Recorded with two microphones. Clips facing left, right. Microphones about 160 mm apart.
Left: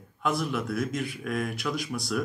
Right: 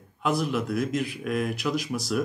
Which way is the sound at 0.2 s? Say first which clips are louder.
Right 3 dB; centre (ahead or behind).